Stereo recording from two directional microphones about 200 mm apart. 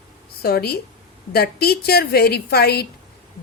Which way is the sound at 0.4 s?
50° left (ahead or behind).